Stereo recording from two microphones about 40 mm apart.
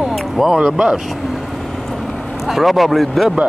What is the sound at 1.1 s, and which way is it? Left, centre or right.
Vehicle, centre.